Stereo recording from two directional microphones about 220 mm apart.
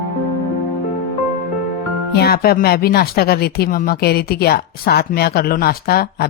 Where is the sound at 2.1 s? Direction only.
45° left (ahead or behind).